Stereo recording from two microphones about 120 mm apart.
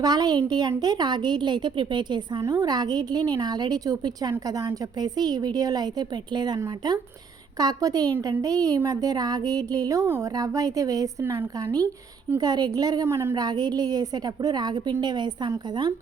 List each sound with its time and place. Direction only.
0.0 s a woman's voice: 35° right (ahead or behind)
7.6 s a woman's voice: 30° right (ahead or behind)
12.4 s a woman's voice: 35° right (ahead or behind)
13.1 s a woman's voice: 20° right (ahead or behind)
13.3 s a woman's voice: 35° right (ahead or behind)